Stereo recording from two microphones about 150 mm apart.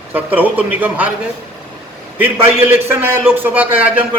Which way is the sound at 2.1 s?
15° right (ahead or behind).